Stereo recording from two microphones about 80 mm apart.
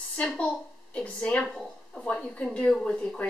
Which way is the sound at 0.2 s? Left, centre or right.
Centre.